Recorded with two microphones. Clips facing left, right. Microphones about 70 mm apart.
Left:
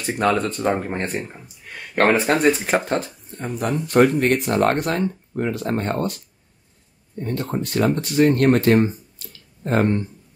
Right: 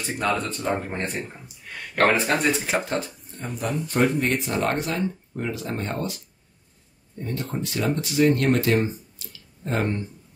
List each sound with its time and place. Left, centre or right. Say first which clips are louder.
0.0 s speech: left 5 dB; left
2.3 s speech: left 5 dB; left
3.5 s speech: left 7 dB; left
7.2 s speech: left 4 dB; left